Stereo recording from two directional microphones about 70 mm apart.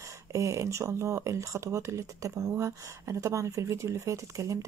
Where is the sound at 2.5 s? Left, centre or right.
Right.